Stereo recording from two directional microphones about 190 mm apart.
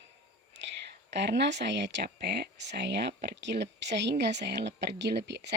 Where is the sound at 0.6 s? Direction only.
70° right (ahead or behind).